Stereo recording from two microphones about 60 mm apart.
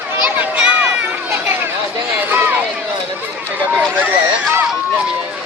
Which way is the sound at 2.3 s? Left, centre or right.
Right.